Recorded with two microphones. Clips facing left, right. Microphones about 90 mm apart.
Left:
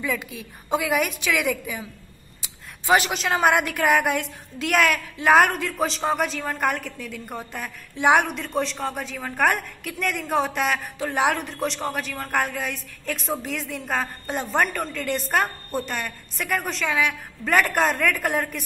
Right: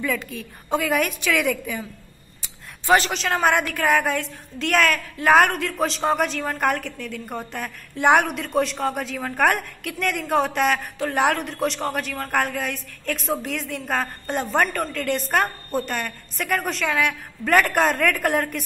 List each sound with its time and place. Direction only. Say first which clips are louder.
0.0 s a woman's voice: right 2 dB; 5° left (ahead or behind)
3.6 s a woman's voice: even; 15° left (ahead or behind)